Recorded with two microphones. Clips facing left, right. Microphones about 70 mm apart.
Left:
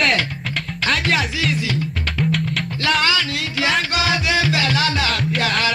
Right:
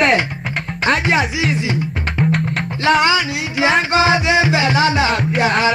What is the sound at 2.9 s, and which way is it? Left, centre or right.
Music, centre.